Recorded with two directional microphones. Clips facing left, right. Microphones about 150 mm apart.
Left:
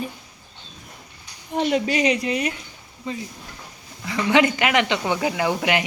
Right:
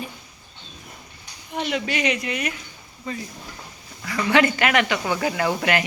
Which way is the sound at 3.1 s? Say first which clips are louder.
Left 1 dB; 20° left (ahead or behind).